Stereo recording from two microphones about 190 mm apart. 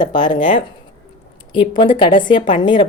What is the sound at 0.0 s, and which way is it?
Speech, 25° left (ahead or behind).